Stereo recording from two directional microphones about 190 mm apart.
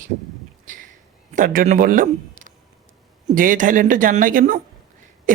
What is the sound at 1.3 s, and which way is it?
A man's voice, 45° right (ahead or behind).